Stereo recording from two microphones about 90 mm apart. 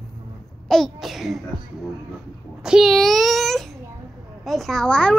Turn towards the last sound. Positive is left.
turn(degrees=10)  # may be behind; listen again after turning